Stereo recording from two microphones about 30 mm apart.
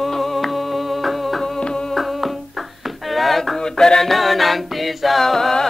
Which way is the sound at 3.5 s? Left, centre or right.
Left.